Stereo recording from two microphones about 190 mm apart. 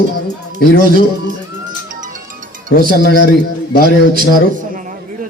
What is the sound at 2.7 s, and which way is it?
Speech, 55° left (ahead or behind).